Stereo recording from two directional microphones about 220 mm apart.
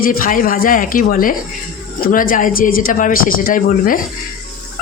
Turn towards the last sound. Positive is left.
turn(degrees=40)  # may be behind; listen again after turning